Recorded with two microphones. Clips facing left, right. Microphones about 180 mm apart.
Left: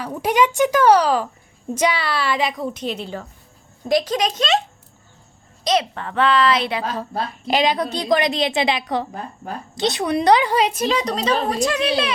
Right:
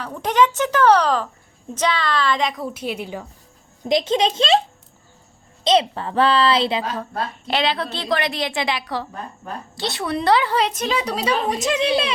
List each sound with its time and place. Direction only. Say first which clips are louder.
0.0 s a woman's voice: even; 10° left (ahead or behind)
2.7 s a woman's voice: even; 10° right (ahead or behind)
3.8 s a woman's voice: right 1 dB; 25° right (ahead or behind)
5.6 s a woman's voice: right 3 dB; 25° right (ahead or behind)
7.4 s a woman's voice: left 4 dB; 15° left (ahead or behind)
10.8 s a woman's voice: left 2 dB; 5° right (ahead or behind)
11.4 s a woman's voice: even; 20° right (ahead or behind)